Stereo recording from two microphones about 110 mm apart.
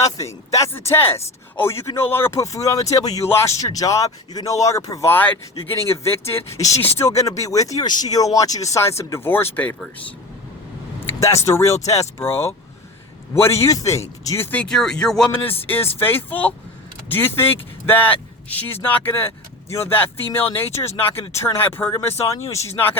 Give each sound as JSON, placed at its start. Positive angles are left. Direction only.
{"t": 0.0, "sound": "speech", "side_deg": 30}
{"t": 5.1, "sound": "speech", "side_deg": 15}
{"t": 11.2, "sound": "speech", "side_deg": 30}
{"t": 14.6, "sound": "speech", "side_deg": 5}
{"t": 15.6, "sound": "speech", "side_deg": 15}